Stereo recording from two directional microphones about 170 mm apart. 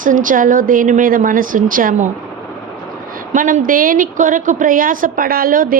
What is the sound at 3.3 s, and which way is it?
A woman's voice, 50° right (ahead or behind).